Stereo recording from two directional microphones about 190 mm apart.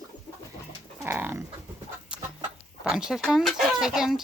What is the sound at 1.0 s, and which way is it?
Speech, 10° right (ahead or behind).